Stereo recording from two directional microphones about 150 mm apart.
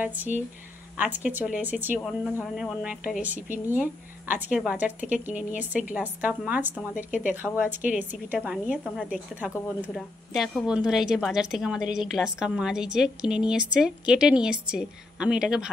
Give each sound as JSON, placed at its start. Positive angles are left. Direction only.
{"t": 0.0, "sound": "speech", "side_deg": -10}
{"t": 2.0, "sound": "a woman's voice", "side_deg": 0}